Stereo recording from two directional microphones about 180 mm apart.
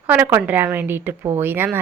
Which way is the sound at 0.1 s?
10° right (ahead or behind).